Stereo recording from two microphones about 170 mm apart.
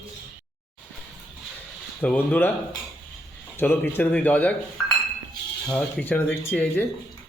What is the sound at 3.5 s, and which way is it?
Speech, 10° left (ahead or behind).